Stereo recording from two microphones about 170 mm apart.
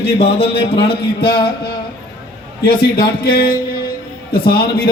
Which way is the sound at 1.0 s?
65° left (ahead or behind).